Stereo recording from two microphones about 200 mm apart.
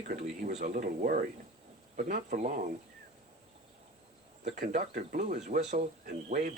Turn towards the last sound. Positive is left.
turn(degrees=-40)  # may be behind; listen again after turning